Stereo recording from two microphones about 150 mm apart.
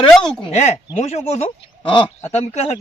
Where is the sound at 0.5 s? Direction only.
50° left (ahead or behind).